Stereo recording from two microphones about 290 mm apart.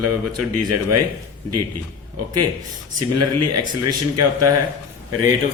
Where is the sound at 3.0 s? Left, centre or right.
Right.